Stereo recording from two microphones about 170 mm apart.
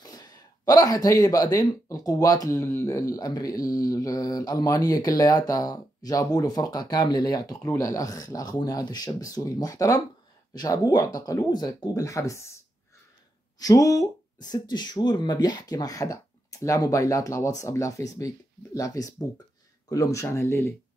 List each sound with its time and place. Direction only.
0.0 s speech: 25° left (ahead or behind)
13.6 s speech: 20° left (ahead or behind)